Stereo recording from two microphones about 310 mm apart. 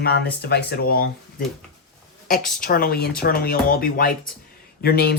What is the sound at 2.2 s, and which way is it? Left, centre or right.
A woman's voice, left.